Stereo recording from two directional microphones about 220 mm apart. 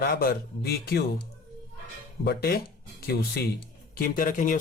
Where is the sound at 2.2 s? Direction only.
45° left (ahead or behind).